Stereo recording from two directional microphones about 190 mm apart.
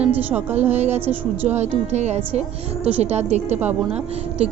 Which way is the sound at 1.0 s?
10° right (ahead or behind).